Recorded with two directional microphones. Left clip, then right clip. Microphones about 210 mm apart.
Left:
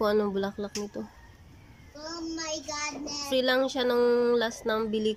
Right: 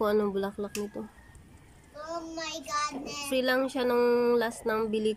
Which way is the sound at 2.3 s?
55° right (ahead or behind).